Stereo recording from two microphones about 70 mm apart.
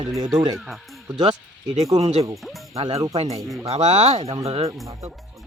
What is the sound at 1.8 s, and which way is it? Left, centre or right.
Speech, right.